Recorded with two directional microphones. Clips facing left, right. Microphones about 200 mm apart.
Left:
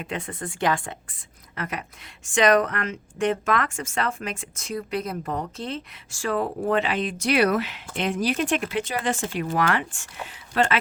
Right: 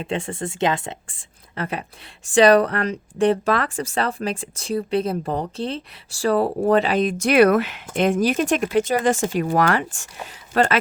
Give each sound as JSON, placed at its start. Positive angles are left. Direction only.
{"t": 0.0, "sound": "a woman's voice", "side_deg": -30}